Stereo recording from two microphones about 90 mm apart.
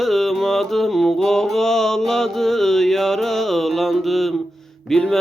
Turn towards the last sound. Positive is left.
turn(degrees=5)  # may be behind; listen again after turning